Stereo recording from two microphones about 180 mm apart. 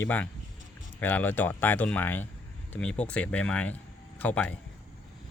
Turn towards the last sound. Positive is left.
turn(degrees=10)  # may be behind; listen again after turning